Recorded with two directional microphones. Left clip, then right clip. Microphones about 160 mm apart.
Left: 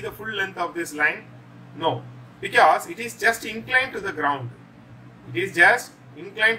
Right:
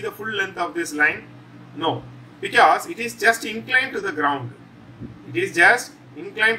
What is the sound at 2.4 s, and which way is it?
Speech, centre (ahead or behind).